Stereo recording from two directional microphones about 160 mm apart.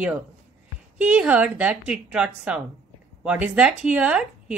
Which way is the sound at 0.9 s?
10° right (ahead or behind).